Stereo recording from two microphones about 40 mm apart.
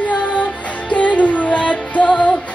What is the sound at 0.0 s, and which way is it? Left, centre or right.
Music, left.